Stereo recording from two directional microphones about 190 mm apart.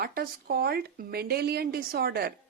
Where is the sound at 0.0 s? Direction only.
50° right (ahead or behind).